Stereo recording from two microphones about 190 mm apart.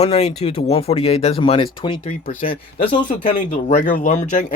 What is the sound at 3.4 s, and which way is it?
Speech, 45° left (ahead or behind).